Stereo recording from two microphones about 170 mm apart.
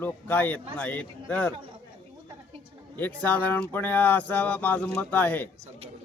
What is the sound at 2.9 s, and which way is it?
Speech, 10° left (ahead or behind).